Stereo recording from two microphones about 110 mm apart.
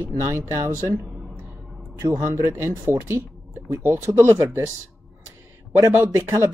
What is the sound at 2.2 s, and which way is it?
Speech, 25° right (ahead or behind).